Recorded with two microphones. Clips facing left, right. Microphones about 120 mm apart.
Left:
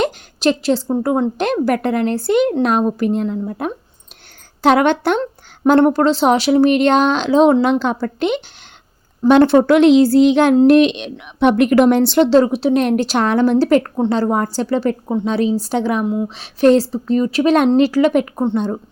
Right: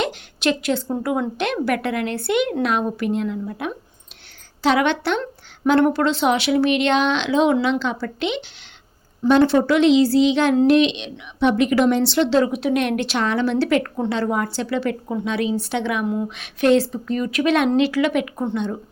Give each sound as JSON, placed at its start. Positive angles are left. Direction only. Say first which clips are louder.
{"t": 0.0, "sound": "a woman's voice", "louder": "left 5 dB", "side_deg": 35}
{"t": 4.6, "sound": "a woman's voice", "louder": "left 5 dB", "side_deg": 50}
{"t": 5.2, "sound": "a sound", "louder": "left 5 dB", "side_deg": 45}
{"t": 5.8, "sound": "a woman's voice", "louder": "left 5 dB", "side_deg": 40}
{"t": 9.2, "sound": "a woman's voice", "louder": "left 5 dB", "side_deg": 55}